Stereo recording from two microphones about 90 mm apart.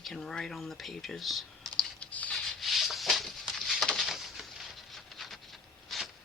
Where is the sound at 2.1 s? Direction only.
15° left (ahead or behind).